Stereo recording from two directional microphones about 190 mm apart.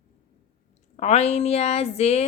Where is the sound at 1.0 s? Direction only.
35° left (ahead or behind).